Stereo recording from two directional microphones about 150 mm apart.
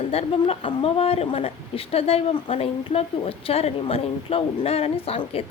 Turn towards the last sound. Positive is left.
turn(degrees=40)  # may be behind; listen again after turning